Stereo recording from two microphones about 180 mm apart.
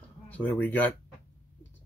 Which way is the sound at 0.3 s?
10° left (ahead or behind).